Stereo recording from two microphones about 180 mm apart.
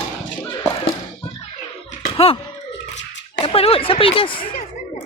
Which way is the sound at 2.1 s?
30° left (ahead or behind).